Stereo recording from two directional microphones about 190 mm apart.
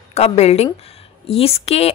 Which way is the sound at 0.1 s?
35° left (ahead or behind).